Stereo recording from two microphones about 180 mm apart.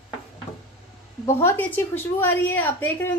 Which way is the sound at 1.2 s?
15° left (ahead or behind).